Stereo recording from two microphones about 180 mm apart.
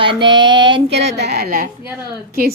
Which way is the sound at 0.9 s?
70° right (ahead or behind).